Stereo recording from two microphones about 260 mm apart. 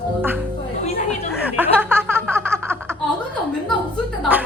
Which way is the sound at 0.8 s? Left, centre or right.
Left.